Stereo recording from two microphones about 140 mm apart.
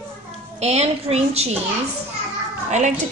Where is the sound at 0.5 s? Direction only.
50° right (ahead or behind).